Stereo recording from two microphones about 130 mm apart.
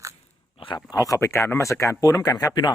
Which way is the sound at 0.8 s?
25° left (ahead or behind).